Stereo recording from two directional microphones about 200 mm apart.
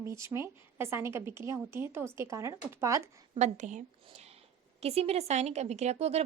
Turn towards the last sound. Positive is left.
turn(degrees=-30)  # may be behind; listen again after turning